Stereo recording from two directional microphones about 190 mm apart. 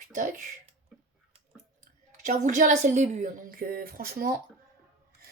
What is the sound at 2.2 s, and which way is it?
Speech, 40° right (ahead or behind).